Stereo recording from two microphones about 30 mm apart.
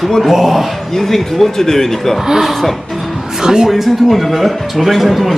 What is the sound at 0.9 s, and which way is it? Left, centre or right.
A man's voice, centre.